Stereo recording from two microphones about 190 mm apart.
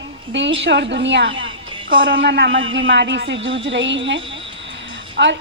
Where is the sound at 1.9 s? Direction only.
50° right (ahead or behind).